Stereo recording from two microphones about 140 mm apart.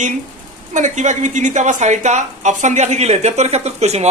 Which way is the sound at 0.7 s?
60° right (ahead or behind).